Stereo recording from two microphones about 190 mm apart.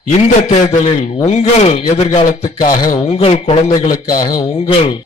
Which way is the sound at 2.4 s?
45° left (ahead or behind).